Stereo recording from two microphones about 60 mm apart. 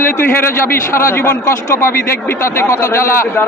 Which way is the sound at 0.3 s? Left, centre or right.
Left.